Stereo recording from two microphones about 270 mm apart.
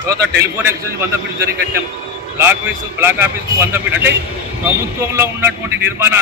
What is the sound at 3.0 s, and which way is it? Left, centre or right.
Speech, centre.